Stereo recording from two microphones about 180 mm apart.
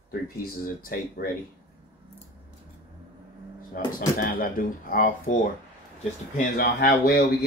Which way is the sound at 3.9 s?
50° left (ahead or behind).